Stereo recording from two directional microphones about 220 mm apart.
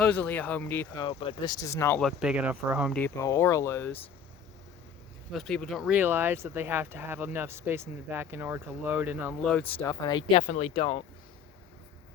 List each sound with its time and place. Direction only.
0.0 s speech: 5° left (ahead or behind)
1.0 s speech: 20° left (ahead or behind)
2.0 s speech: centre (ahead or behind)
3.0 s speech: 10° left (ahead or behind)
5.3 s speech: centre (ahead or behind)
9.4 s speech: 5° left (ahead or behind); by 11.0 s 25° left (ahead or behind)